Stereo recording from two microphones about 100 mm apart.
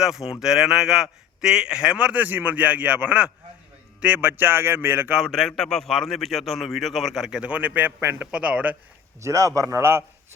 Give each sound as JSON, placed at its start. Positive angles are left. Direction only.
{"t": 0.0, "sound": "a man's voice", "side_deg": -5}
{"t": 5.3, "sound": "a man's voice", "side_deg": 0}
{"t": 9.2, "sound": "speech", "side_deg": -30}